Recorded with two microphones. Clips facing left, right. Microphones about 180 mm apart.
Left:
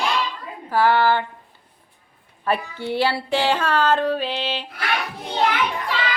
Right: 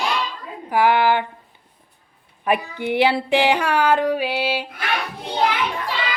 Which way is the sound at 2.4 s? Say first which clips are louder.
Right 2 dB; 15° right (ahead or behind).